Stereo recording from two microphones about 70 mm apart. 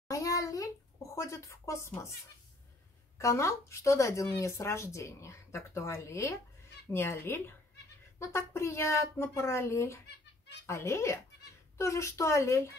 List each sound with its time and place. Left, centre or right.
0.1 s a sound: left
1.1 s speech: left
3.2 s speech: left